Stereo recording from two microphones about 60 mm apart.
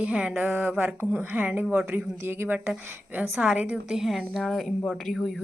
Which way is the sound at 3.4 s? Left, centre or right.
Centre.